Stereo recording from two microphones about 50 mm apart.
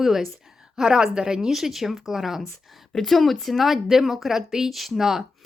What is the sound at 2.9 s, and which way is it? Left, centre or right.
Speech, centre.